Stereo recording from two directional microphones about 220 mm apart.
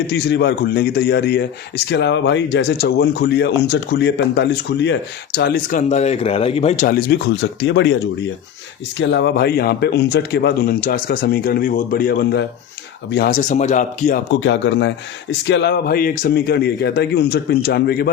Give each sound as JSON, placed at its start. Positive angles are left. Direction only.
{"t": 0.1, "sound": "speech", "side_deg": 50}
{"t": 5.9, "sound": "speech", "side_deg": 30}
{"t": 14.3, "sound": "speech", "side_deg": 55}